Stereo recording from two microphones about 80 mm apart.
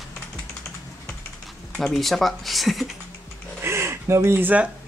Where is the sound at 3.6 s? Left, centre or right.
Right.